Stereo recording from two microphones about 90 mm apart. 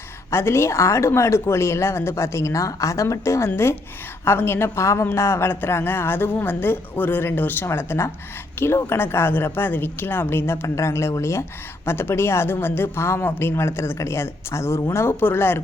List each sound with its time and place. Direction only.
0.3 s speech: 30° left (ahead or behind)